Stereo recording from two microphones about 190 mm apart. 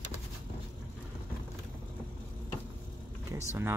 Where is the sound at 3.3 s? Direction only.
15° right (ahead or behind).